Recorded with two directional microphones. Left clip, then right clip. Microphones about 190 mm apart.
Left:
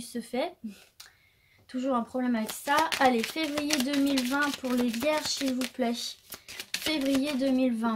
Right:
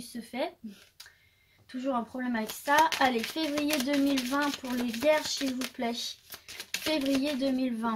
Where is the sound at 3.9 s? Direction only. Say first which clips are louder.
Even; 15° left (ahead or behind).